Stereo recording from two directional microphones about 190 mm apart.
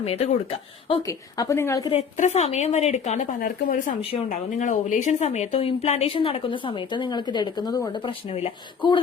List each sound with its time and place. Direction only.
0.0 s speech: 30° left (ahead or behind)
1.0 s a woman's voice: 15° left (ahead or behind)
1.9 s speech: 35° left (ahead or behind)